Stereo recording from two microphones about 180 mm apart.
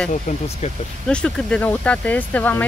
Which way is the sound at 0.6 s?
40° left (ahead or behind).